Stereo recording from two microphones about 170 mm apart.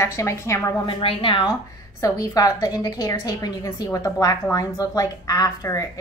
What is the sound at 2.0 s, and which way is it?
A woman's voice, 20° left (ahead or behind).